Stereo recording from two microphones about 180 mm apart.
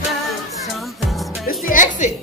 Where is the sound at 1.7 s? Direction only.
45° left (ahead or behind).